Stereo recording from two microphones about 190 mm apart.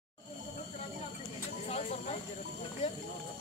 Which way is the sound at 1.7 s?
35° left (ahead or behind).